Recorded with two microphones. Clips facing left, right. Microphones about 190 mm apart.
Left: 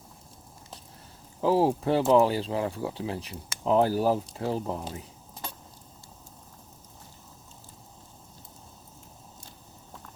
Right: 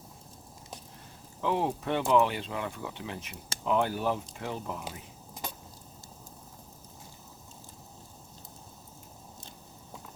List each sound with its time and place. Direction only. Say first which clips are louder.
1.4 s speech: left 6 dB; 35° left (ahead or behind)